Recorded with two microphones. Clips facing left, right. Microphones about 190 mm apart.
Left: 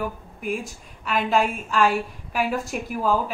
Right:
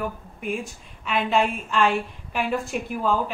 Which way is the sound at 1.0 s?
Centre (ahead or behind).